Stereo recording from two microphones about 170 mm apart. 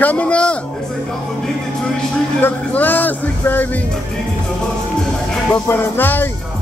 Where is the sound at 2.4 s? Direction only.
10° left (ahead or behind).